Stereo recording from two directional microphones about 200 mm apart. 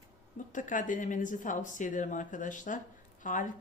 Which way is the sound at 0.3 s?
40° left (ahead or behind).